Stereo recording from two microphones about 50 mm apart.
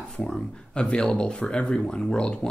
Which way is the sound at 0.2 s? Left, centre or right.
Centre.